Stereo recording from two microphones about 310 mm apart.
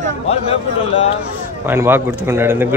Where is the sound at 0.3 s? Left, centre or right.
Centre.